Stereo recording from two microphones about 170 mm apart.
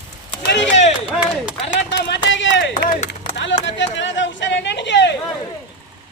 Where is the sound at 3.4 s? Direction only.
90° left.